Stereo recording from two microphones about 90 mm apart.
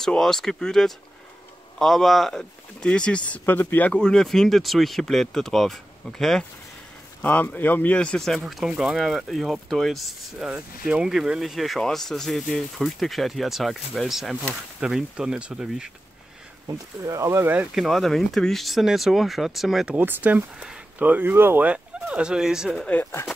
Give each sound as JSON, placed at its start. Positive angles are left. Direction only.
{"t": 0.0, "sound": "speech", "side_deg": 5}
{"t": 3.9, "sound": "speech", "side_deg": 10}
{"t": 7.2, "sound": "speech", "side_deg": 20}
{"t": 10.5, "sound": "speech", "side_deg": -10}
{"t": 16.6, "sound": "speech", "side_deg": -40}
{"t": 17.7, "sound": "speech", "side_deg": 0}
{"t": 20.0, "sound": "speech", "side_deg": -20}
{"t": 20.5, "sound": "speech", "side_deg": -5}
{"t": 21.0, "sound": "speech", "side_deg": -20}
{"t": 22.0, "sound": "speech", "side_deg": -10}